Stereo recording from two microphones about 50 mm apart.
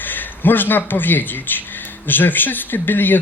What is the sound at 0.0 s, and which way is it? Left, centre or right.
A man's voice, left.